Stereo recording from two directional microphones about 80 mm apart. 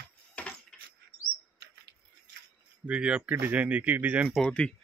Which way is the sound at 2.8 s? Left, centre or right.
Centre.